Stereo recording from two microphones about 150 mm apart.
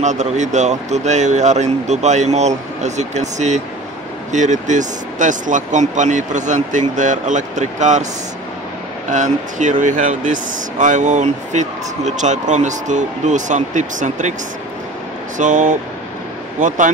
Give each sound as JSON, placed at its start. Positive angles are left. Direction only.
{"t": 0.0, "sound": "speech", "side_deg": -50}
{"t": 9.1, "sound": "speech", "side_deg": -55}
{"t": 15.3, "sound": "speech", "side_deg": -55}